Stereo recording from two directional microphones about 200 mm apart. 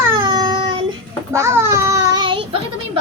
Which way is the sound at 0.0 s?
20° right (ahead or behind).